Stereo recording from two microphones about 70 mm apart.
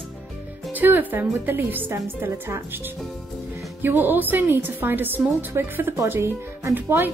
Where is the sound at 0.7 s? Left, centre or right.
Right.